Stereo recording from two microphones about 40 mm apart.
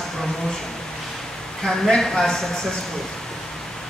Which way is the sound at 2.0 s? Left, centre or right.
Centre.